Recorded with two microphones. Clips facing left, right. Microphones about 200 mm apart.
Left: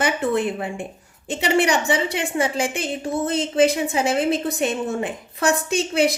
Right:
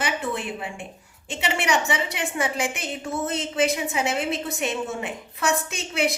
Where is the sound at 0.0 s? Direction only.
45° left (ahead or behind).